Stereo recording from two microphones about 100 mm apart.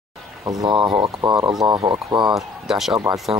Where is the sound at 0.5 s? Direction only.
45° right (ahead or behind).